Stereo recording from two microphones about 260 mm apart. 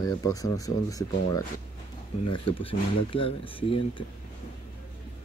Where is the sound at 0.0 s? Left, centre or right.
Centre.